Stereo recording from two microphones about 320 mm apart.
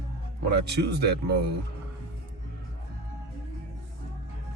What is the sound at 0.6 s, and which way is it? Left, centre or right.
Speech, right.